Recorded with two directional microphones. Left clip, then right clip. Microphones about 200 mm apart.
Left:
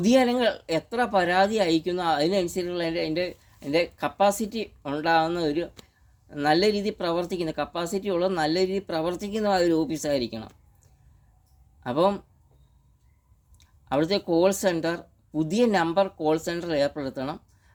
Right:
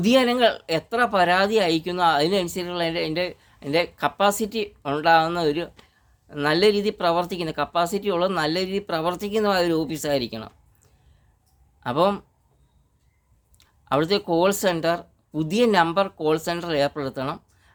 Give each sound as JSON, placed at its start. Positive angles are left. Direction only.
{"t": 0.0, "sound": "speech", "side_deg": -20}
{"t": 11.8, "sound": "speech", "side_deg": -20}
{"t": 13.6, "sound": "speech", "side_deg": -20}